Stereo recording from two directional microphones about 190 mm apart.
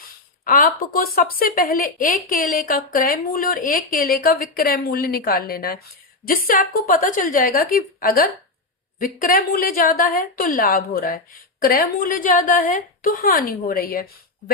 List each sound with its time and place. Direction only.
0.0 s a woman's voice: 50° left (ahead or behind)